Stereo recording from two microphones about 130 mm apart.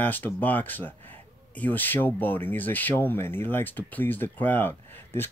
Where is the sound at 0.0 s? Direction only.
15° left (ahead or behind).